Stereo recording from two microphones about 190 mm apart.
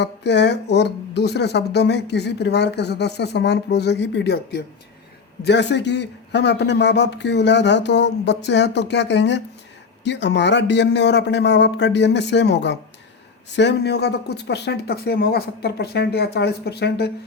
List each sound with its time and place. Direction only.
0.0 s speech: 65° left (ahead or behind)